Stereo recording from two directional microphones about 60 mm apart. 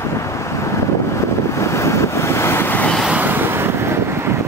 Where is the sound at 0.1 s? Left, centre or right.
Left.